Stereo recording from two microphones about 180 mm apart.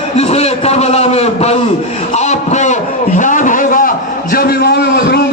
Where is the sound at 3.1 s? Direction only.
45° left (ahead or behind).